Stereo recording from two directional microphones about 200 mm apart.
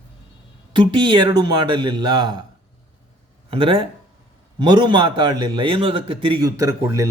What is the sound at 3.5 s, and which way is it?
A man's voice, 25° right (ahead or behind).